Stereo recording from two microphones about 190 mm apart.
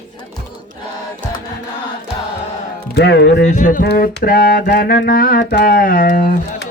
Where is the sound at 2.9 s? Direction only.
60° left (ahead or behind).